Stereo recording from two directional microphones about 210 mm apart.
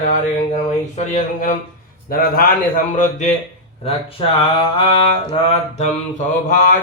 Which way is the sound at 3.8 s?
25° left (ahead or behind).